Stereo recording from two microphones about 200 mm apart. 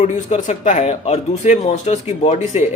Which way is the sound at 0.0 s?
35° left (ahead or behind).